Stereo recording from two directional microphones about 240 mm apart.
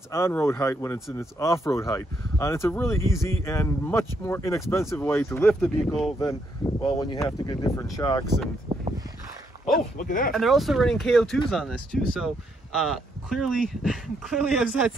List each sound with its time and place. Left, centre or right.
0.1 s speech: centre
6.8 s speech: left
8.7 s a sound: right
9.9 s speech: left
10.3 s speech: centre